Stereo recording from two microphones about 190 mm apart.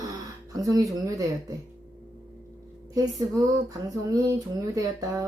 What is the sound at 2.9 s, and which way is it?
Speech, 20° right (ahead or behind).